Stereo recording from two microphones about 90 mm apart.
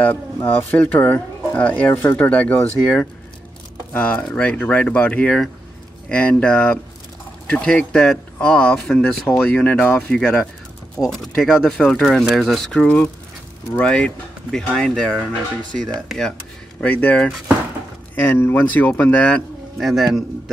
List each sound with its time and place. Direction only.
0.0 s speech: 15° left (ahead or behind)
3.9 s speech: 15° left (ahead or behind)
16.8 s speech: 15° left (ahead or behind)
19.8 s speech: centre (ahead or behind)